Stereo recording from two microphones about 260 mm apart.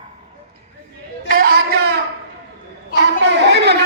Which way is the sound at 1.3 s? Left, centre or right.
Right.